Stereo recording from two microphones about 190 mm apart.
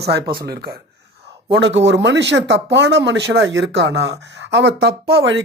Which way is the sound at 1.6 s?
70° right (ahead or behind).